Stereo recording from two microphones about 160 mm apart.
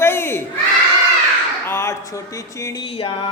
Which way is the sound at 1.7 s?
15° left (ahead or behind).